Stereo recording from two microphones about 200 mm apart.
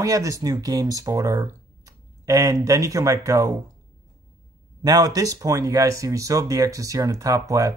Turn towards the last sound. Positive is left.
turn(degrees=-15)  # may be behind; listen again after turning